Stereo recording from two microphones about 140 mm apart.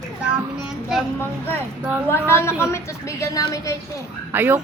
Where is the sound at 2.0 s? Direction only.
15° left (ahead or behind).